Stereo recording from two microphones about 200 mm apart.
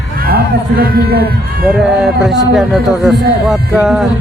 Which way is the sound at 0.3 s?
50° right (ahead or behind).